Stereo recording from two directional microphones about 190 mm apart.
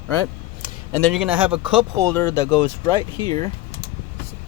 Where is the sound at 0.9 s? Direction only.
5° left (ahead or behind).